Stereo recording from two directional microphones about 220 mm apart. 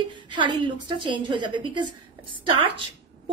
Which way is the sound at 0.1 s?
20° right (ahead or behind).